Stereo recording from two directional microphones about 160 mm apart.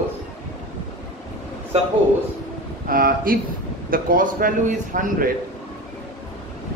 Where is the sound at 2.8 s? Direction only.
65° right (ahead or behind).